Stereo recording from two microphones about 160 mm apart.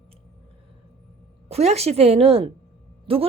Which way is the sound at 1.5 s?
40° right (ahead or behind).